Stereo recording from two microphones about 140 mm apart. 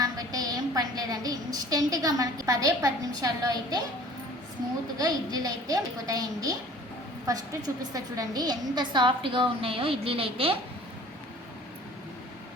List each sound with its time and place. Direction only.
0.0 s a woman's voice: 25° right (ahead or behind)
4.9 s a woman's voice: 25° right (ahead or behind)